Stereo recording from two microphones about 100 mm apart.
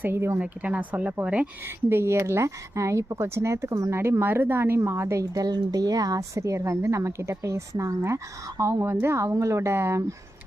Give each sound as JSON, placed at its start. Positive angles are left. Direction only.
{"t": 0.0, "sound": "speech", "side_deg": -25}
{"t": 0.3, "sound": "speech", "side_deg": -10}
{"t": 1.6, "sound": "speech", "side_deg": -25}